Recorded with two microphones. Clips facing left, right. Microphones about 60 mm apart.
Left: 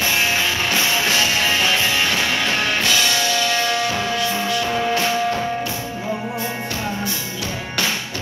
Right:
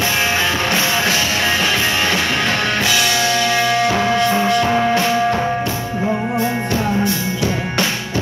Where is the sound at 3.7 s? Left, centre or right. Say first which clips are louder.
Right 5 dB; right.